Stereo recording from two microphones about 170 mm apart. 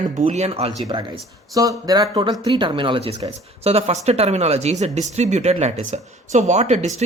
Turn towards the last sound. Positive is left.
turn(degrees=-40)  # may be behind; listen again after turning